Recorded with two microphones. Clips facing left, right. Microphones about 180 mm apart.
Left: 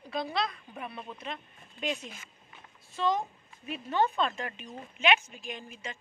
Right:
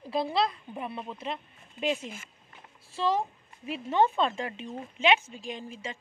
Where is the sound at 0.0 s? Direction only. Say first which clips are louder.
Right 5 dB; 30° right (ahead or behind).